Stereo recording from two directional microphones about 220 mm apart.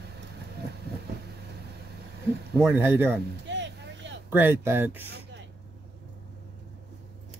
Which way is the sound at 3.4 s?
55° right (ahead or behind).